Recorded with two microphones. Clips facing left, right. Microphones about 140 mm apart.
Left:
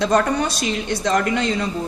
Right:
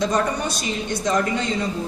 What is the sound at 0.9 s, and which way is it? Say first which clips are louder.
Speech: left 1 dB; 75° left (ahead or behind).